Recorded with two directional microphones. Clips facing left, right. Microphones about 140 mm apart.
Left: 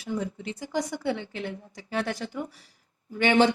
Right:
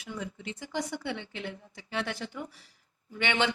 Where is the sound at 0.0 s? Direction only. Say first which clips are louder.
Left 7 dB; 35° left (ahead or behind).